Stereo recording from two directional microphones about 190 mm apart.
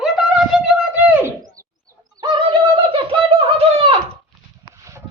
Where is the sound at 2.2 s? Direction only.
25° right (ahead or behind).